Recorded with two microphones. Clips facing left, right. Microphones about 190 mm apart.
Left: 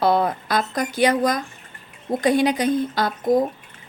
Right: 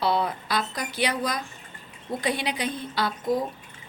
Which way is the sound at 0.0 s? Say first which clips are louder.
Left 6 dB; 45° left (ahead or behind).